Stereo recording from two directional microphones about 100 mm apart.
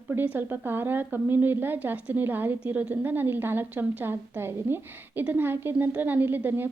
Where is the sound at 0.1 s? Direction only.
20° right (ahead or behind).